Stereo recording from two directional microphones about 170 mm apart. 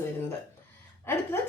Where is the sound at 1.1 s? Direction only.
15° left (ahead or behind).